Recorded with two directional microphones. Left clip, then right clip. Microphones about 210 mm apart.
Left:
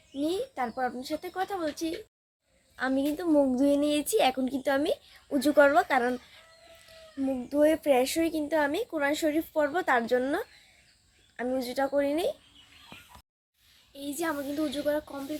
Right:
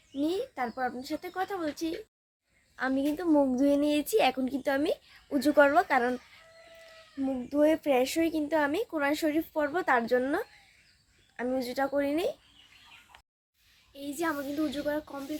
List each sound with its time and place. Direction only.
0.2 s a woman's voice: centre (ahead or behind)
7.2 s a woman's voice: centre (ahead or behind)
13.9 s a woman's voice: centre (ahead or behind)